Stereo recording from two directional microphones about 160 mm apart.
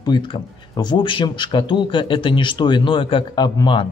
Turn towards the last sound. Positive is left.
turn(degrees=30)  # may be behind; listen again after turning